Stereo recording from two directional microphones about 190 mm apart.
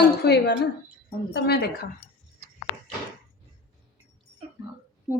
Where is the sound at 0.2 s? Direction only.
60° left (ahead or behind).